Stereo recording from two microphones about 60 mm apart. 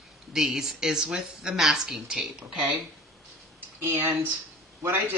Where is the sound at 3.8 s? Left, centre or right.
Right.